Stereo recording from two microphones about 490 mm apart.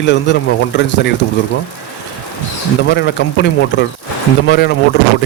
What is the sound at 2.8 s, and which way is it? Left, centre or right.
Speech, left.